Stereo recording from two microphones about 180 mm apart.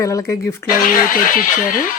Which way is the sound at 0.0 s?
15° left (ahead or behind).